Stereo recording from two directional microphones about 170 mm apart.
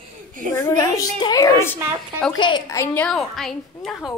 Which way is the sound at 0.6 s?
15° left (ahead or behind).